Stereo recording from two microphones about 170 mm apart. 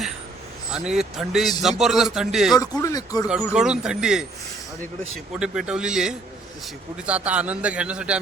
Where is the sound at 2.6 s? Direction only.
20° left (ahead or behind).